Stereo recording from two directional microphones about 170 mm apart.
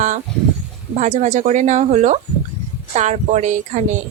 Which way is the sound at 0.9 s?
45° right (ahead or behind).